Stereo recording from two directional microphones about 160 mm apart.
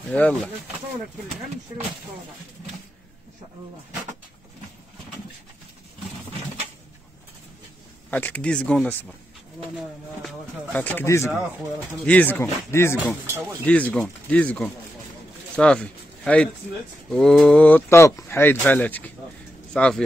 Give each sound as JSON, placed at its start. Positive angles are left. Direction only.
{"t": 0.1, "sound": "speech", "side_deg": 10}
{"t": 8.1, "sound": "speech", "side_deg": 10}
{"t": 10.8, "sound": "speech", "side_deg": 10}